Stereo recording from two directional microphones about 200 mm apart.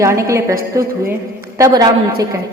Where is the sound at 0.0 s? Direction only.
15° right (ahead or behind).